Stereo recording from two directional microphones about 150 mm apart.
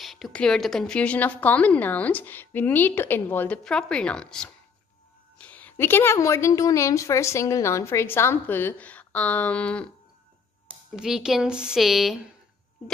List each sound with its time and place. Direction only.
0.0 s a woman's voice: centre (ahead or behind)
11.0 s a woman's voice: 5° right (ahead or behind)